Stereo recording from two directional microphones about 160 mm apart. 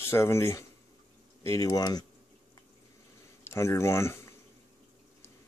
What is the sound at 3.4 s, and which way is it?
Speech, 15° left (ahead or behind).